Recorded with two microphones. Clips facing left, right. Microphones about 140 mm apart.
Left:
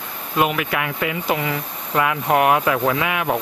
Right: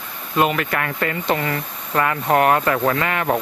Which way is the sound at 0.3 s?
5° left (ahead or behind).